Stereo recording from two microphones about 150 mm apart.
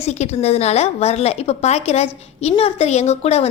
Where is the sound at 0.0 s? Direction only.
45° left (ahead or behind).